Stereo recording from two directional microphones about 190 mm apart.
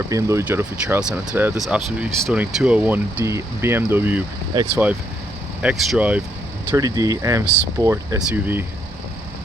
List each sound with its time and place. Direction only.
0.1 s speech: 15° right (ahead or behind)
5.6 s speech: centre (ahead or behind)
6.7 s speech: 20° right (ahead or behind)